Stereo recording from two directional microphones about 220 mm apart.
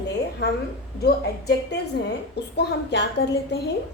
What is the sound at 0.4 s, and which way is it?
Speech, 45° left (ahead or behind).